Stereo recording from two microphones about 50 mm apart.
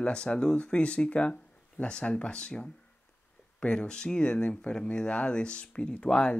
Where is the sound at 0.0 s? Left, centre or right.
Centre.